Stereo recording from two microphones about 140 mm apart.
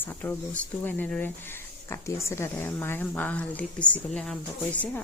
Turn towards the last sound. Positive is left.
turn(degrees=10)  # may be behind; listen again after turning